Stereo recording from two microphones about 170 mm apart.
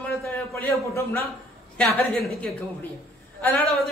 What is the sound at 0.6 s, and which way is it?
A man's voice, 15° left (ahead or behind).